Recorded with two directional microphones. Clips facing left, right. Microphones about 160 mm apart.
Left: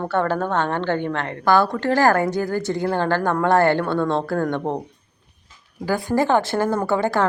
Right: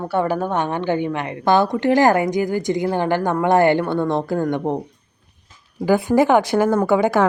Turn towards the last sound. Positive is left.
turn(degrees=-15)  # may be behind; listen again after turning